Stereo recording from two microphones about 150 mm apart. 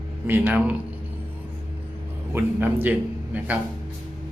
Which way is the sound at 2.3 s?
15° right (ahead or behind).